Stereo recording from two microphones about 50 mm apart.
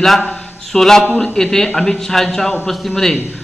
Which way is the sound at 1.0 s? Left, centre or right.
Left.